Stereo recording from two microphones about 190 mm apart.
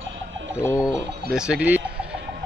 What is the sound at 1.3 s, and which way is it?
Speech, 5° right (ahead or behind).